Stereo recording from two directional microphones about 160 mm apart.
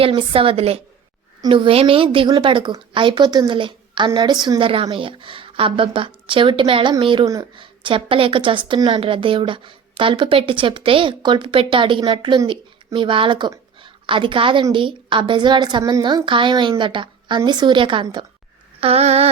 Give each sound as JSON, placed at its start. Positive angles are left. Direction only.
{"t": 0.0, "sound": "a woman's voice", "side_deg": -35}